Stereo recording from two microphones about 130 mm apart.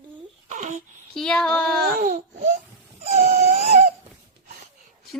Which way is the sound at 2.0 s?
85° right.